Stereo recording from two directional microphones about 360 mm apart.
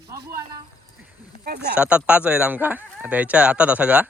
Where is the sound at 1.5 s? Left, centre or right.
Right.